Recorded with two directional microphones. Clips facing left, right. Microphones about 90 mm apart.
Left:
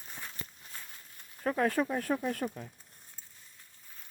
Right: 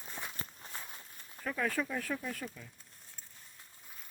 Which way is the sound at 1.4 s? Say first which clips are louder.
Left 6 dB; 40° left (ahead or behind).